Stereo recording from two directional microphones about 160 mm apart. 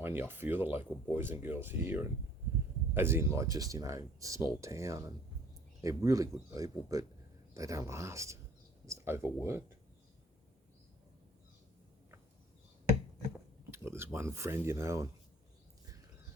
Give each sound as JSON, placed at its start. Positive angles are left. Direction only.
{"t": 0.0, "sound": "speech", "side_deg": -15}
{"t": 13.7, "sound": "speech", "side_deg": -15}